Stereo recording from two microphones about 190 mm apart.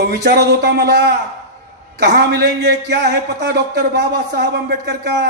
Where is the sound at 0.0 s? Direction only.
60° right (ahead or behind).